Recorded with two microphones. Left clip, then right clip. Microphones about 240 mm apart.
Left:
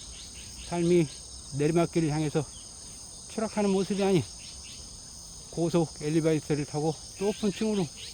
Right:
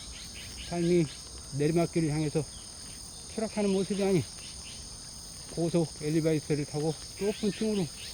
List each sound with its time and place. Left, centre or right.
0.7 s insect: centre
5.5 s insect: centre
7.4 s speech: centre